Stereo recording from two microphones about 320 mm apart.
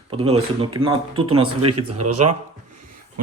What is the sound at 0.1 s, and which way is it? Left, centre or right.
Speech, centre.